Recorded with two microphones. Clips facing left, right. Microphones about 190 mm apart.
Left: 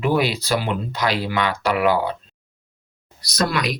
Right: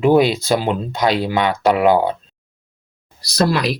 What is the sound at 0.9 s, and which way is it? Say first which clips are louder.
Speech: right 5 dB; 25° right (ahead or behind).